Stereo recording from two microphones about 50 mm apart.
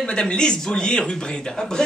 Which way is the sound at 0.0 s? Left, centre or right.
Centre.